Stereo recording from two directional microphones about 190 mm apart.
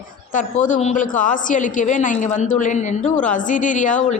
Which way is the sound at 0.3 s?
40° left (ahead or behind).